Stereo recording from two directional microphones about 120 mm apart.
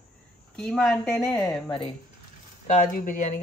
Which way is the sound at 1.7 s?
45° left (ahead or behind).